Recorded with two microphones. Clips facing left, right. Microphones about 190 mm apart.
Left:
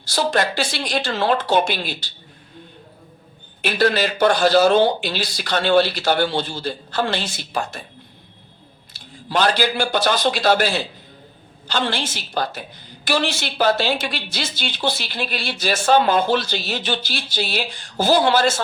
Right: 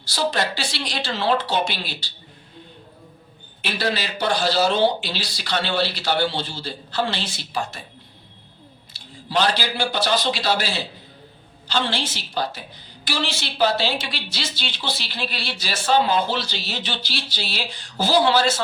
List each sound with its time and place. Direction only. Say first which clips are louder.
0.0 s a woman's voice: left 3 dB; 50° left (ahead or behind)
3.6 s a woman's voice: left 7 dB; 50° left (ahead or behind)
8.9 s a woman's voice: left 1 dB; 50° left (ahead or behind)